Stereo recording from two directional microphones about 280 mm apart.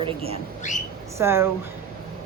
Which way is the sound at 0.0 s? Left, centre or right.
Right.